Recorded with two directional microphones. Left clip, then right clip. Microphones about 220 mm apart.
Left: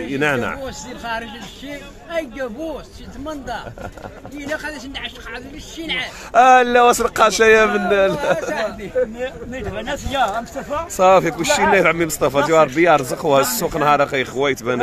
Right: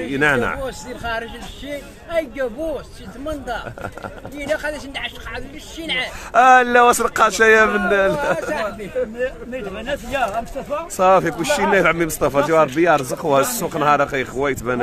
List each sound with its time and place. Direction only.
0.0 s speech: centre (ahead or behind)
0.7 s speech: 25° right (ahead or behind)
6.3 s speech: centre (ahead or behind)